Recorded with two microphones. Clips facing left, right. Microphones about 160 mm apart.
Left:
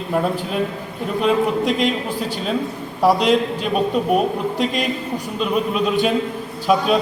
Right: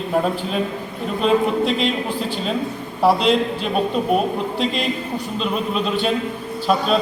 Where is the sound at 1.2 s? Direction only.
10° left (ahead or behind).